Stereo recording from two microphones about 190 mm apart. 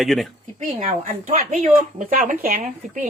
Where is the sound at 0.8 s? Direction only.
40° right (ahead or behind).